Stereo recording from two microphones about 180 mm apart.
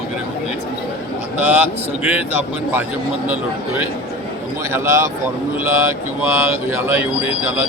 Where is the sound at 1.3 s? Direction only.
10° right (ahead or behind).